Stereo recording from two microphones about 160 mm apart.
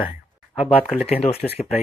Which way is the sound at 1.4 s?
5° left (ahead or behind).